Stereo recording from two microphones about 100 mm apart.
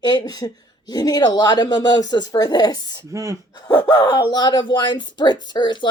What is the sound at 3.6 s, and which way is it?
Speech, 40° left (ahead or behind).